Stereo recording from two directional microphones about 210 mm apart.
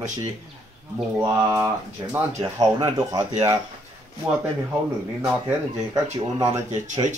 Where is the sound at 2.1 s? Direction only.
15° right (ahead or behind).